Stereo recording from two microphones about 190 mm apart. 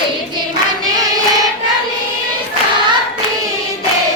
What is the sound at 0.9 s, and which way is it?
Child singing, 20° right (ahead or behind).